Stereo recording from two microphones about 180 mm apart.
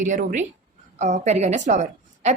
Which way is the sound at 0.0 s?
45° right (ahead or behind).